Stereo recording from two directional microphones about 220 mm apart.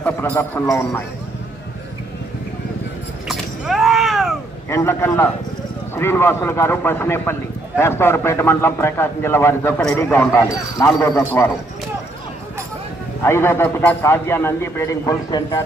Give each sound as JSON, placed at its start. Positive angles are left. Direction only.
{"t": 0.0, "sound": "a man's voice", "side_deg": 10}
{"t": 3.2, "sound": "a sound", "side_deg": 0}
{"t": 4.7, "sound": "a man's voice", "side_deg": 10}
{"t": 13.2, "sound": "a man's voice", "side_deg": 10}